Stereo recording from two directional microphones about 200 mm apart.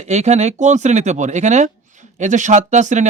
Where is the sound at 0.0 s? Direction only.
35° right (ahead or behind).